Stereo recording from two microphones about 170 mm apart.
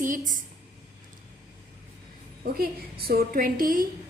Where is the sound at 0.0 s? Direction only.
50° right (ahead or behind).